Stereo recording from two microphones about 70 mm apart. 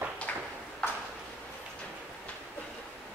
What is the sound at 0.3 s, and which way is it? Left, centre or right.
Ping, centre.